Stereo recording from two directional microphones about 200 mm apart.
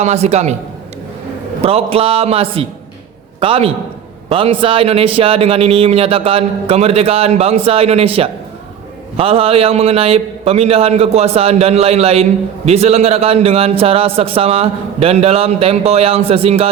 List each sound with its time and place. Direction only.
0.0 s a man's voice: 30° right (ahead or behind)
1.6 s a man's voice: 30° right (ahead or behind)